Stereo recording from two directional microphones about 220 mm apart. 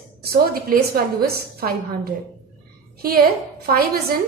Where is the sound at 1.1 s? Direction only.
45° right (ahead or behind).